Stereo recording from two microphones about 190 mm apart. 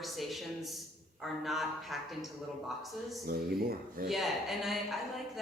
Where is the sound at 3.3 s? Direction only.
55° right (ahead or behind).